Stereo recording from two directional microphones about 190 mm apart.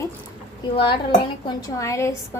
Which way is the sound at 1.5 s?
15° left (ahead or behind).